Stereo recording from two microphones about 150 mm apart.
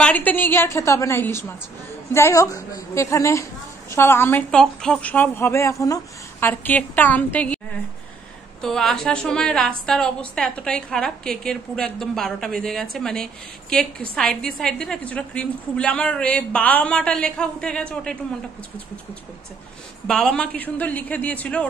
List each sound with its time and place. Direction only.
0.0 s a woman's voice: 10° left (ahead or behind)
20.1 s a woman's voice: 5° left (ahead or behind)